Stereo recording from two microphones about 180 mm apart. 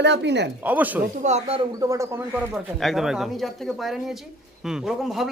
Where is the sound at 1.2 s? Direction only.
35° right (ahead or behind).